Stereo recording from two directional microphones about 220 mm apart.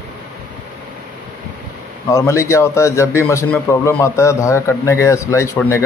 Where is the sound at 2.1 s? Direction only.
15° left (ahead or behind).